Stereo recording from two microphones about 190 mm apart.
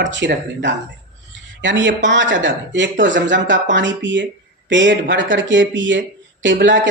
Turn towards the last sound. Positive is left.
turn(degrees=-75)  # may be behind; listen again after turning